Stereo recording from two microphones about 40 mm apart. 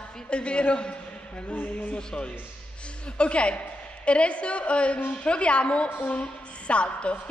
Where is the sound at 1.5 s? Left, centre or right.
Left.